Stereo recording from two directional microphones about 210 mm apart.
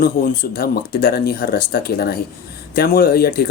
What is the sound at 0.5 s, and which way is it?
Speech, 45° left (ahead or behind).